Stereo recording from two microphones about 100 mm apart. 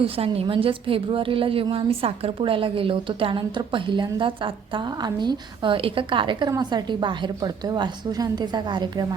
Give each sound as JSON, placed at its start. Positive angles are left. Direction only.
{"t": 0.3, "sound": "a woman's voice", "side_deg": -65}